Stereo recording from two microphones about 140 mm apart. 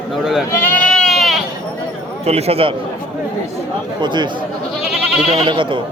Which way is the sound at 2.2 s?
50° right (ahead or behind).